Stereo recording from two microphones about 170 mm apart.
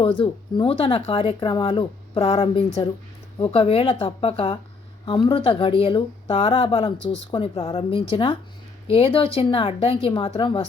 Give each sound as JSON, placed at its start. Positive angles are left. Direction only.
{"t": 0.0, "sound": "speech", "side_deg": 30}